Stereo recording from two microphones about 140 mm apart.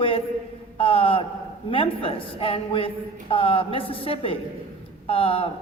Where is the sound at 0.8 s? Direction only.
40° left (ahead or behind).